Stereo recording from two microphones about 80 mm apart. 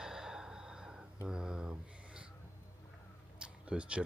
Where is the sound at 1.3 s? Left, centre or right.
Centre.